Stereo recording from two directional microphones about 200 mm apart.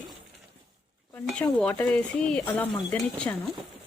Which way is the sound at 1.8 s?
5° left (ahead or behind).